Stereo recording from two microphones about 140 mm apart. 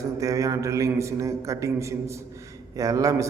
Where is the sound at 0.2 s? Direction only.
25° right (ahead or behind).